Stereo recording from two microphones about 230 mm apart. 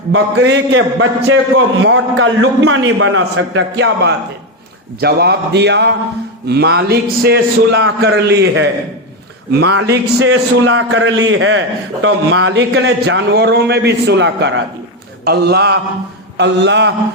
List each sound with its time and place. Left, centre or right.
0.1 s a man's voice: right
10.7 s a man's voice: right